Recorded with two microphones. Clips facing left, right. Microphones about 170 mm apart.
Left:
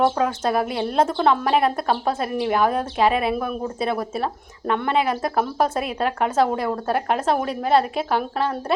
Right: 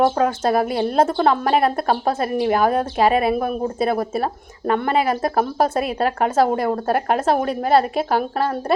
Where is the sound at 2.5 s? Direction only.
45° right (ahead or behind).